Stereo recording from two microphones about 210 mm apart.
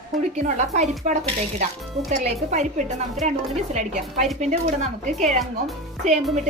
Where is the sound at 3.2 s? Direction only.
Centre (ahead or behind).